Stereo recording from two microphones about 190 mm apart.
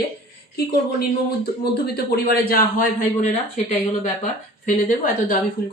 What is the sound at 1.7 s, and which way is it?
Speech, 55° left (ahead or behind).